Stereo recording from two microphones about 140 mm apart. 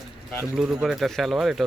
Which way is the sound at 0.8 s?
Centre (ahead or behind).